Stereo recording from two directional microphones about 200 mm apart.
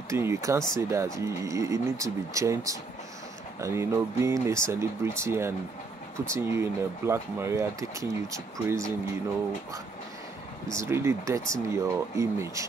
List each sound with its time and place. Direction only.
0.1 s speech: 15° right (ahead or behind)
10.7 s speech: 15° right (ahead or behind)